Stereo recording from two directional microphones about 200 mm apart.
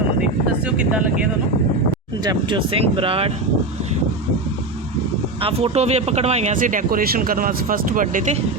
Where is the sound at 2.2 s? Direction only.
25° right (ahead or behind).